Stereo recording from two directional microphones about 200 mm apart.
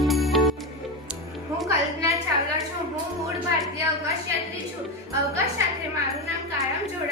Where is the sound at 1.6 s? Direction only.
15° right (ahead or behind).